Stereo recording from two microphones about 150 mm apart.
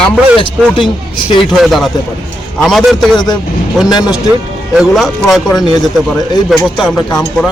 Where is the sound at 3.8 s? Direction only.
25° left (ahead or behind).